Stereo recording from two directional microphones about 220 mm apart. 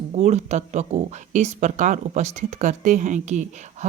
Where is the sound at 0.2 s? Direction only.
30° right (ahead or behind).